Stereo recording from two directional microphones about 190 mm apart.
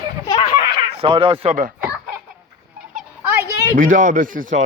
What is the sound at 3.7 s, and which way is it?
Speech, 45° right (ahead or behind).